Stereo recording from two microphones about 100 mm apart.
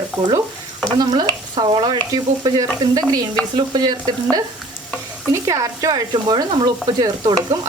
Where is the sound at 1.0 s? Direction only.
45° right (ahead or behind).